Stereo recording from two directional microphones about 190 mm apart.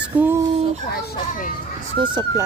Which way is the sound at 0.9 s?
55° left (ahead or behind).